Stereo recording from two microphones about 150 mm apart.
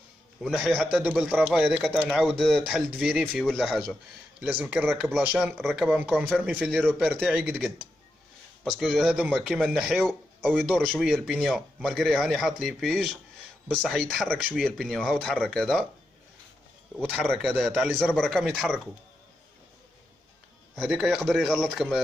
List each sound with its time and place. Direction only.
0.4 s speech: centre (ahead or behind)
5.9 s speech: 10° right (ahead or behind)
7.0 s speech: centre (ahead or behind)
16.9 s speech: 5° left (ahead or behind)
20.9 s speech: 5° right (ahead or behind)